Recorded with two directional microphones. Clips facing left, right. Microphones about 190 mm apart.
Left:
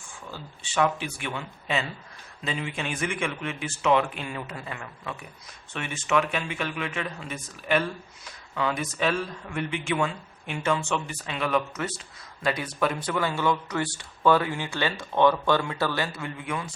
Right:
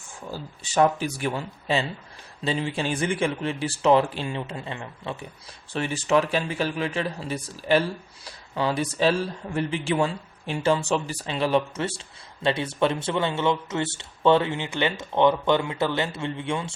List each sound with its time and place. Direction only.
0.3 s speech: 40° right (ahead or behind)